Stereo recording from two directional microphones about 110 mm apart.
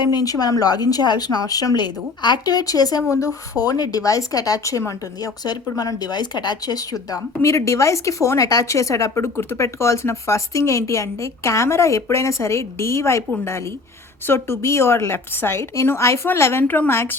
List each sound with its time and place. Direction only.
0.0 s speech: 40° left (ahead or behind)
14.3 s speech: 25° left (ahead or behind)